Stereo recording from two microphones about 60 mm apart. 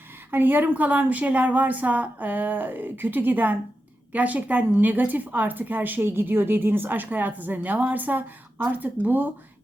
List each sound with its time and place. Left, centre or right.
0.3 s a woman's voice: right